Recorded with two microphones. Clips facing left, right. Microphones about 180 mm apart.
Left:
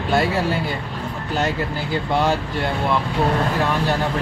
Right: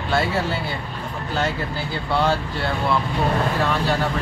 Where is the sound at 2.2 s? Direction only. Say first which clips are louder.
Left 1 dB; 20° left (ahead or behind).